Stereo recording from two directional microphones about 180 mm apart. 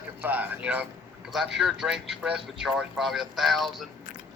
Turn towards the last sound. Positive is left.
turn(degrees=0)  # may be behind; listen again after turning